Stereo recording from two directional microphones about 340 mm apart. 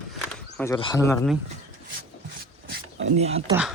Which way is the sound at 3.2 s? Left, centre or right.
Centre.